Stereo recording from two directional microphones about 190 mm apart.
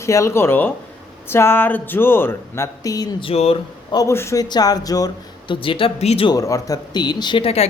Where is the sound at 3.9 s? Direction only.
15° left (ahead or behind).